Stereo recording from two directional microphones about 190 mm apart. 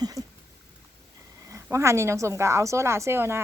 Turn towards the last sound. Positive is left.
turn(degrees=-15)  # may be behind; listen again after turning